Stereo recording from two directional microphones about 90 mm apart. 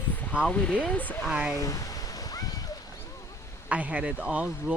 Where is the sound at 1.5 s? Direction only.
40° left (ahead or behind).